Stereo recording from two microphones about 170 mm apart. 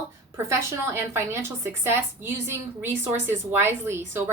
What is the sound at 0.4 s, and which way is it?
A woman's voice, 15° right (ahead or behind).